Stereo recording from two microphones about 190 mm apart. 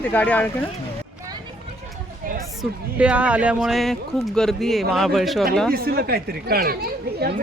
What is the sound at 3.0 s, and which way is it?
Speech, 5° right (ahead or behind).